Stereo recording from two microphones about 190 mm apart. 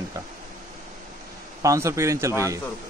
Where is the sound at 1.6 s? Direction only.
15° right (ahead or behind).